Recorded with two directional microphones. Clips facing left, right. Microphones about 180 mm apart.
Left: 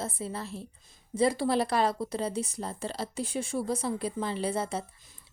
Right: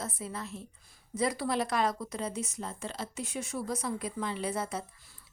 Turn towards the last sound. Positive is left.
turn(degrees=30)  # may be behind; listen again after turning